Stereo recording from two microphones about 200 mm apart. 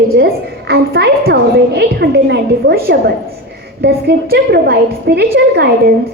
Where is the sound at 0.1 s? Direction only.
55° right (ahead or behind).